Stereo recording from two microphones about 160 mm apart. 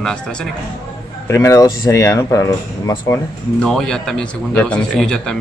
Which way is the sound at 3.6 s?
5° left (ahead or behind).